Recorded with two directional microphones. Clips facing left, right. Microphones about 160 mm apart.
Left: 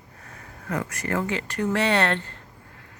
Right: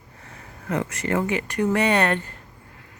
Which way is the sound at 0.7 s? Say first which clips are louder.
Right 3 dB; 25° right (ahead or behind).